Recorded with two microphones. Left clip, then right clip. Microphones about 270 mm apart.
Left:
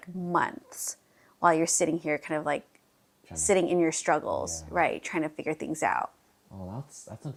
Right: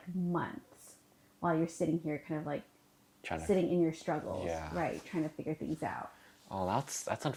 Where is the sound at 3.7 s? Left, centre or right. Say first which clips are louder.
Left 7 dB; centre.